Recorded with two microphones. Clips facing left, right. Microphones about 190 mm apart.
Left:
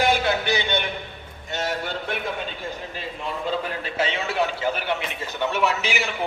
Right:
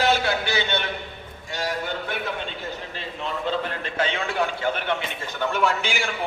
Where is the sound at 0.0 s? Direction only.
15° left (ahead or behind).